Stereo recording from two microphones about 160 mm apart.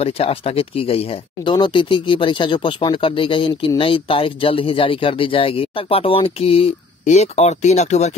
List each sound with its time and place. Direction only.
0.0 s speech: 35° left (ahead or behind)